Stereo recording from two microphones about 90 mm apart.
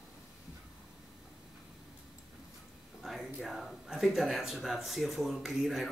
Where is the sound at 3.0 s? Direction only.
Centre (ahead or behind).